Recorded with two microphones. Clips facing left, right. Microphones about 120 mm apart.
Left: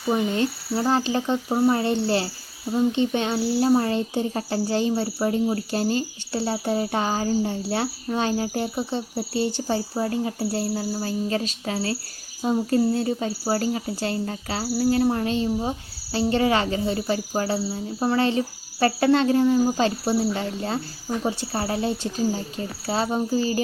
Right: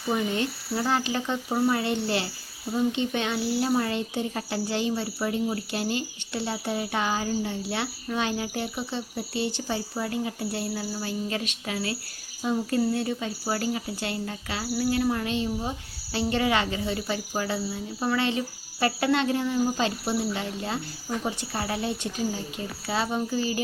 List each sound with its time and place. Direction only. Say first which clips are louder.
0.3 s speech: left 4 dB; 30° left (ahead or behind)
1.5 s speech: left 4 dB; 20° left (ahead or behind)
1.7 s speech: left 4 dB; 35° left (ahead or behind)